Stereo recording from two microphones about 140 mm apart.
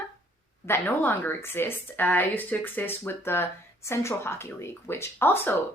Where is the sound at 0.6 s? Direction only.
15° left (ahead or behind).